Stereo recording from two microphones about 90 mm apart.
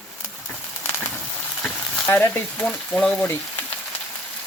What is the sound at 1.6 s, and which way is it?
Frying, 5° left (ahead or behind).